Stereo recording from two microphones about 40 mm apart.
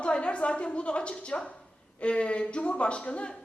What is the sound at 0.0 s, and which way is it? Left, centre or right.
A woman's voice, left.